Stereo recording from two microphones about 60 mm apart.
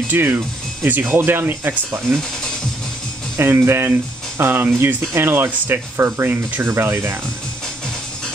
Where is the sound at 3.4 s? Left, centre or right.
Right.